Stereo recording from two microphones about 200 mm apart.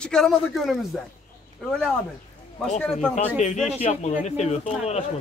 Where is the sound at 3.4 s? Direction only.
35° left (ahead or behind).